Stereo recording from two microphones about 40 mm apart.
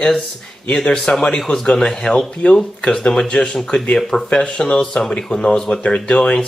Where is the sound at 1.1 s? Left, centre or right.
Left.